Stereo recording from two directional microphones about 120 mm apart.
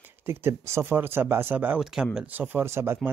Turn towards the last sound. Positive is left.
turn(degrees=-20)  # may be behind; listen again after turning